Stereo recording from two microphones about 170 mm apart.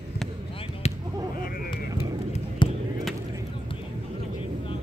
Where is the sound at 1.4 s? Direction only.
60° left (ahead or behind).